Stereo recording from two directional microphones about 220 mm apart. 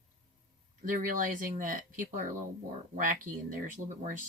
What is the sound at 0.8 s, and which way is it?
Speech, 40° right (ahead or behind).